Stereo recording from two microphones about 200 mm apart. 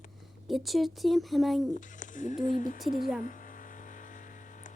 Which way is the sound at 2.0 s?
40° left (ahead or behind).